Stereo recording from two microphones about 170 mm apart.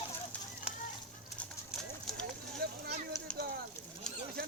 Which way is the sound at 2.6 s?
65° right (ahead or behind).